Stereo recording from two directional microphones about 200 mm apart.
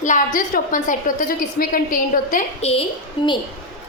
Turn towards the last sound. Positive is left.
turn(degrees=25)  # may be behind; listen again after turning